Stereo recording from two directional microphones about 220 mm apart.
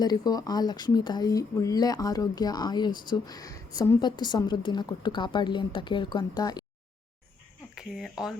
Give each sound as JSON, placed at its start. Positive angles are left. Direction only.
{"t": 0.0, "sound": "a woman's voice", "side_deg": 20}
{"t": 7.8, "sound": "speech", "side_deg": 0}